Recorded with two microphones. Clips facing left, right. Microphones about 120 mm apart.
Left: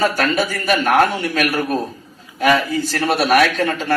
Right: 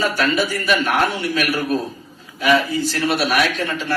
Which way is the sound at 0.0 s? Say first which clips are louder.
Left 2 dB; 45° left (ahead or behind).